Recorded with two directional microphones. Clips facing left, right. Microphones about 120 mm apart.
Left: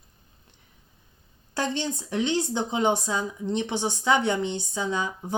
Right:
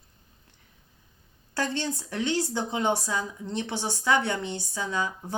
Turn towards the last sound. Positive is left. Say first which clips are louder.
# left 2 dB
turn(degrees=20)  # may be behind; listen again after turning